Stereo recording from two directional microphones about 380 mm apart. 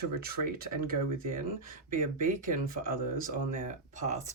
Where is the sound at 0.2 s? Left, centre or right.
Right.